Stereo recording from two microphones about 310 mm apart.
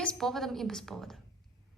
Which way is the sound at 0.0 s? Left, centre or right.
Centre.